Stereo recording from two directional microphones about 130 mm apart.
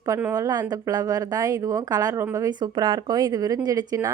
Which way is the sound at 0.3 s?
30° right (ahead or behind).